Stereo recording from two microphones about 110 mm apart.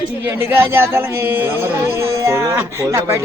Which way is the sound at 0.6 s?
20° right (ahead or behind).